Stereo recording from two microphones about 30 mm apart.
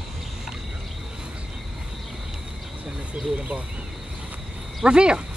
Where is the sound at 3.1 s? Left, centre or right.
Right.